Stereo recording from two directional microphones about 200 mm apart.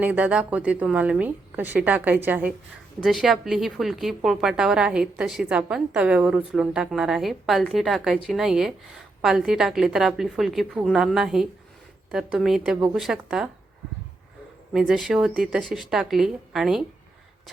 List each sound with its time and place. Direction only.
0.0 s a woman's voice: 5° right (ahead or behind)
14.7 s speech: centre (ahead or behind)